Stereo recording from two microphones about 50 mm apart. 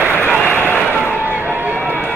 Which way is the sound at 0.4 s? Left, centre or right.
Left.